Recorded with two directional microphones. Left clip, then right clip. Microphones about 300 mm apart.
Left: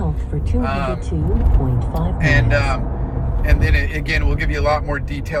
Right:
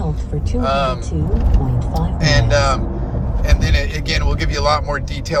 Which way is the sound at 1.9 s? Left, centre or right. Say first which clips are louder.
Even; centre.